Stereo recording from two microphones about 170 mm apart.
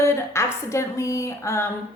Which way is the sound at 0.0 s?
15° left (ahead or behind).